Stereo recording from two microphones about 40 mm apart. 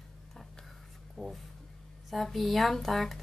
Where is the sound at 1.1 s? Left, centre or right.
Centre.